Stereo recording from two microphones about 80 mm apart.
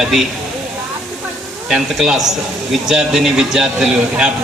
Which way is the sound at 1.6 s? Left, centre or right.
Centre.